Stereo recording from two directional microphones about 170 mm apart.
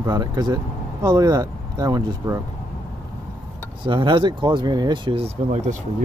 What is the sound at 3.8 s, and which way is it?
Speech, 30° right (ahead or behind).